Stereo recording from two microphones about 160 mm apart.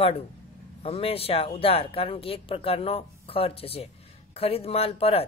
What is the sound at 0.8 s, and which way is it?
Speech, 40° left (ahead or behind).